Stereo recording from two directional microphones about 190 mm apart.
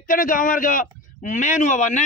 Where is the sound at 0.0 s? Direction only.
45° left (ahead or behind).